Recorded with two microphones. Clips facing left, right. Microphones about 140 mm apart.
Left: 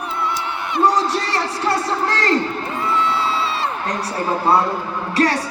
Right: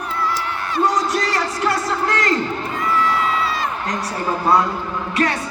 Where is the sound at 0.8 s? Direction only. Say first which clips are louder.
Left 2 dB; 30° left (ahead or behind).